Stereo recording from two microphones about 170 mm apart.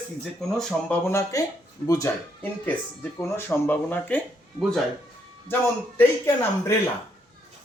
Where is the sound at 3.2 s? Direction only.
15° left (ahead or behind).